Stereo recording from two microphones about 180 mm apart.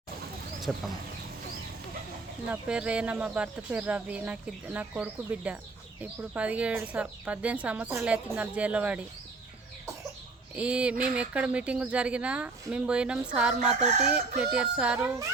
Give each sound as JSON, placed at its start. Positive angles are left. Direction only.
{"t": 0.7, "sound": "speech", "side_deg": 0}
{"t": 2.5, "sound": "speech", "side_deg": -5}
{"t": 10.5, "sound": "speech", "side_deg": -5}
{"t": 13.6, "sound": "chicken", "side_deg": -35}
{"t": 14.1, "sound": "speech", "side_deg": -5}